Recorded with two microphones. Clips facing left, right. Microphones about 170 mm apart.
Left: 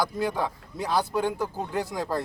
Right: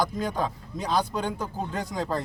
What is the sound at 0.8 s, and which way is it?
Speech, 20° right (ahead or behind).